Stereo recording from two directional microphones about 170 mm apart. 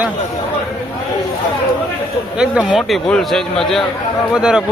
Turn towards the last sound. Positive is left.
turn(degrees=-5)  # may be behind; listen again after turning